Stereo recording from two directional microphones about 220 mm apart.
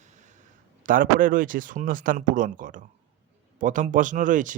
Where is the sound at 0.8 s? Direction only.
40° right (ahead or behind).